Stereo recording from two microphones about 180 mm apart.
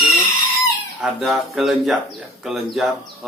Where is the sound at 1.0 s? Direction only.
Centre (ahead or behind).